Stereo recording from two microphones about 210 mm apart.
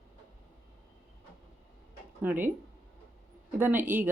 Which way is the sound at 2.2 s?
10° right (ahead or behind).